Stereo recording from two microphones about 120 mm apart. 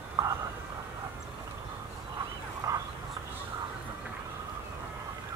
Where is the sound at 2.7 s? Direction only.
30° right (ahead or behind).